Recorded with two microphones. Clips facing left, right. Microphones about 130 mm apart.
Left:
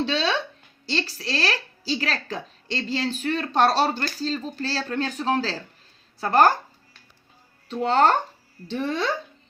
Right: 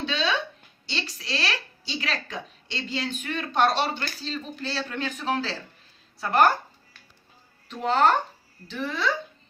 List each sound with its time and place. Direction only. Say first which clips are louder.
0.0 s a woman's voice: left 3 dB; 35° left (ahead or behind)
7.7 s a woman's voice: left 2 dB; 35° left (ahead or behind)